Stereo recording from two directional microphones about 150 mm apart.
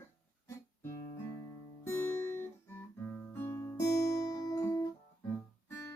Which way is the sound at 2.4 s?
15° left (ahead or behind).